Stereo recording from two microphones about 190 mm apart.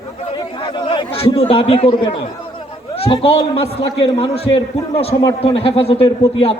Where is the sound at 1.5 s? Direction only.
30° left (ahead or behind).